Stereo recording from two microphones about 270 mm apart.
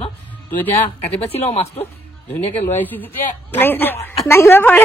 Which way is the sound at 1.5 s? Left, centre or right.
Left.